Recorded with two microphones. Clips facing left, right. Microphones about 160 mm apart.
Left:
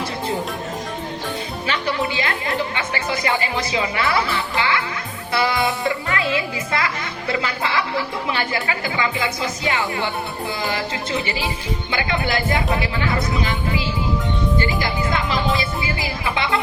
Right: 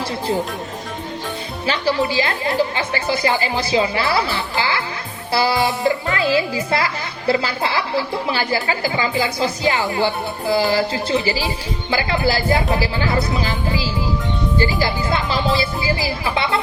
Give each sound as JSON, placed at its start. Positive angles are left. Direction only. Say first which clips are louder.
{"t": 1.6, "sound": "speech", "louder": "right 5 dB", "side_deg": -30}